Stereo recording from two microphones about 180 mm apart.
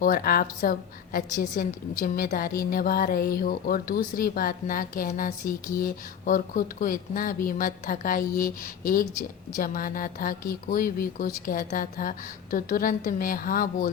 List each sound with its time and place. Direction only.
0.0 s a woman's voice: 55° left (ahead or behind)